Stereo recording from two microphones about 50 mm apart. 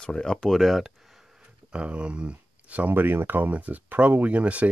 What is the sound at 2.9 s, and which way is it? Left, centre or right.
Speech, right.